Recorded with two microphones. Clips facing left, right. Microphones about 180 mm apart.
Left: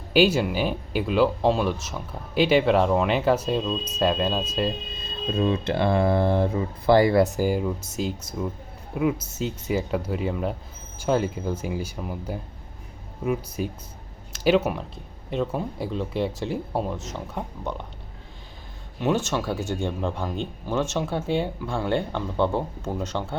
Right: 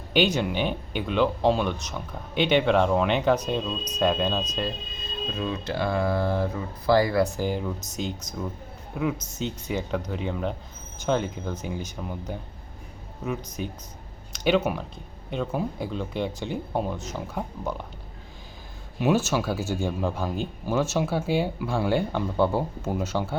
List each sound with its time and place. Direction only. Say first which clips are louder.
0.1 s speech: left 3 dB; 5° left (ahead or behind)
5.4 s speech: left 6 dB; 30° left (ahead or behind)
7.3 s speech: left 4 dB; 10° left (ahead or behind)
18.9 s speech: right 1 dB; 10° right (ahead or behind)